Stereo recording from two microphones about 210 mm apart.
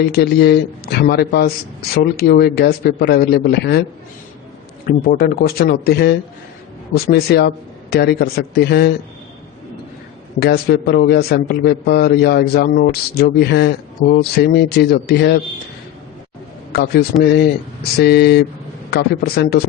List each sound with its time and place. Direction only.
0.0 s a man's voice: 50° left (ahead or behind)
4.9 s a man's voice: 45° left (ahead or behind)
10.4 s a man's voice: 50° left (ahead or behind)
16.7 s a man's voice: 50° left (ahead or behind)